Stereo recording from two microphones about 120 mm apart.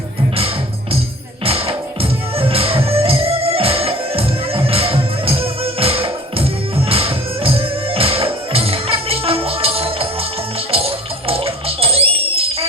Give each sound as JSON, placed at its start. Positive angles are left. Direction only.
{"t": 0.3, "sound": "music", "side_deg": -55}